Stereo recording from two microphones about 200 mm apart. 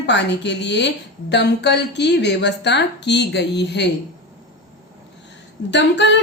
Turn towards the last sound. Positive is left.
turn(degrees=60)  # may be behind; listen again after turning